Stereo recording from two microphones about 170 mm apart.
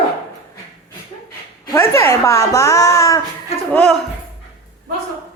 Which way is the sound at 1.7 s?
15° left (ahead or behind).